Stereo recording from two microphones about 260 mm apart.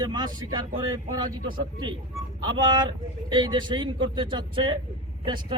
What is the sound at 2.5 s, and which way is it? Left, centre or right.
A man's voice, centre.